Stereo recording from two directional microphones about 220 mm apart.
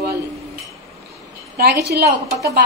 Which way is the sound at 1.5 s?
45° right (ahead or behind).